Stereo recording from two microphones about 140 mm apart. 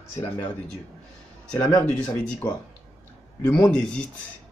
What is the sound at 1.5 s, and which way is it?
Speech, 10° left (ahead or behind).